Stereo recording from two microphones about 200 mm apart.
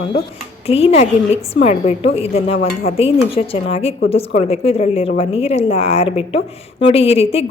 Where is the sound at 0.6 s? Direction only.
30° left (ahead or behind).